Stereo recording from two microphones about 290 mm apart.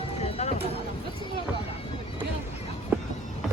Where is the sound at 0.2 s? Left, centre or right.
Left.